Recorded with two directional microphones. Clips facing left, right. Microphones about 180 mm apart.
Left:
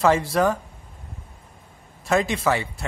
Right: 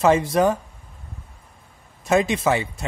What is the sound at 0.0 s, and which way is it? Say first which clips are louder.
Speech: right 2 dB; 20° right (ahead or behind).